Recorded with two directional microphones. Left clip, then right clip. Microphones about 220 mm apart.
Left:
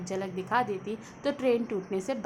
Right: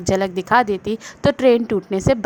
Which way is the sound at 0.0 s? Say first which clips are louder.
Right 14 dB; 40° right (ahead or behind).